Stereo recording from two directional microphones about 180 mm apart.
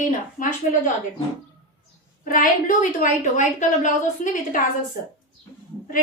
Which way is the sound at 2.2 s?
50° left (ahead or behind).